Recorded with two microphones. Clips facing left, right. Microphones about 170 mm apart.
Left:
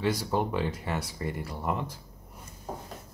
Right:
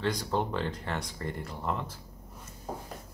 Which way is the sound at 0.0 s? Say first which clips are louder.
Left 2 dB; 10° left (ahead or behind).